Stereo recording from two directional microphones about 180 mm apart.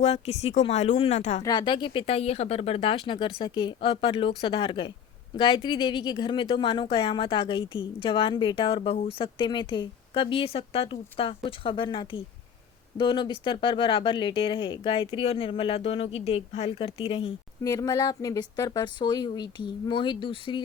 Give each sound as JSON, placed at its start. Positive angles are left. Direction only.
{"t": 0.0, "sound": "speech", "side_deg": 35}
{"t": 1.4, "sound": "speech", "side_deg": 20}